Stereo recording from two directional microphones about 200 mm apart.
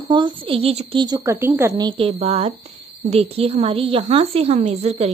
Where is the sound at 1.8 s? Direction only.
25° right (ahead or behind).